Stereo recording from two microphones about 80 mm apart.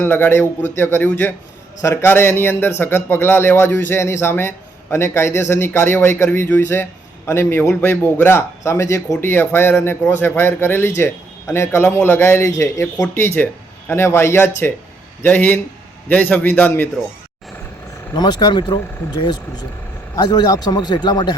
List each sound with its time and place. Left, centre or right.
0.0 s a man's voice: left
1.8 s a man's voice: left
13.1 s a man's voice: left
18.1 s speech: left